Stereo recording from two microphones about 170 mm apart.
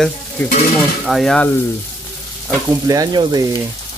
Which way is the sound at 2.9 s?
25° right (ahead or behind).